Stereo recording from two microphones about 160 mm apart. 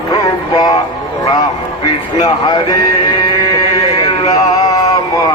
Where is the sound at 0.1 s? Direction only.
25° left (ahead or behind).